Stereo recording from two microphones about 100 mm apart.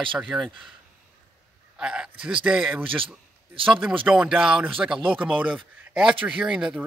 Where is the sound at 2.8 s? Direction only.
60° right (ahead or behind).